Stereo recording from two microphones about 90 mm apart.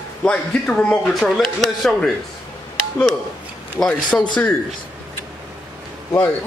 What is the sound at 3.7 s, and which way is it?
Speech, 10° left (ahead or behind).